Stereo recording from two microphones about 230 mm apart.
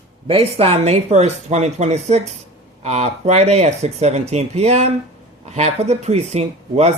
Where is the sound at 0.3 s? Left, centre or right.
Right.